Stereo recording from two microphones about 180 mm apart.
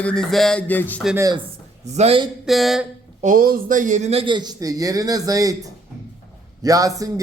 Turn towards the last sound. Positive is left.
turn(degrees=-20)  # may be behind; listen again after turning